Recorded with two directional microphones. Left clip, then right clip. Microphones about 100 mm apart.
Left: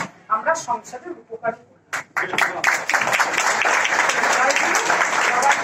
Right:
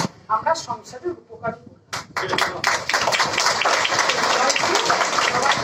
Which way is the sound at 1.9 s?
35° right (ahead or behind).